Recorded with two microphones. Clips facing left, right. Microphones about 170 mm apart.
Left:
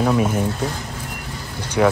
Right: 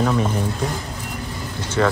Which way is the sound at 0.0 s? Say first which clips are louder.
Left 2 dB; 10° left (ahead or behind).